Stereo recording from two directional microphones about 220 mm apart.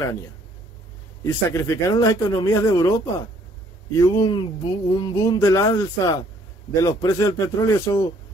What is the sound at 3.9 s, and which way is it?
Speech, 15° left (ahead or behind).